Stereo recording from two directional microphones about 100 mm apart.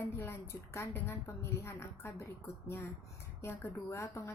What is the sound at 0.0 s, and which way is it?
A woman's voice, 25° left (ahead or behind).